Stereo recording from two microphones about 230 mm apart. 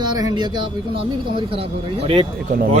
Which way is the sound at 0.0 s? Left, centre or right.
Centre.